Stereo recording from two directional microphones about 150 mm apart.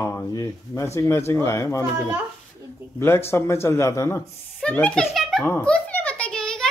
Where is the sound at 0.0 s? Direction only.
15° left (ahead or behind).